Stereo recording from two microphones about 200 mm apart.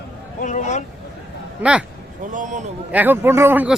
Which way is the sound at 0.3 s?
40° left (ahead or behind).